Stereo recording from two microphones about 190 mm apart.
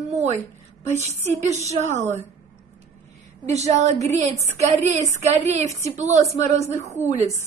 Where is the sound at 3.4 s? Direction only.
35° right (ahead or behind).